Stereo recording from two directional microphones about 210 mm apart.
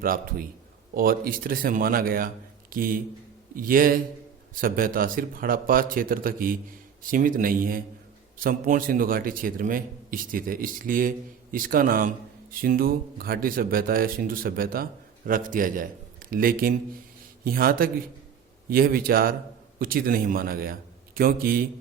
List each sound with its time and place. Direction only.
0.0 s a man's voice: 45° right (ahead or behind)